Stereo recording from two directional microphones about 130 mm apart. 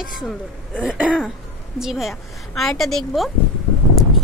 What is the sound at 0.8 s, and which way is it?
Throat clearing, 10° right (ahead or behind).